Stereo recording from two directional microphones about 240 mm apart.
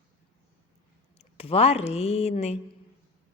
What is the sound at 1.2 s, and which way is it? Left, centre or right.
Speech, left.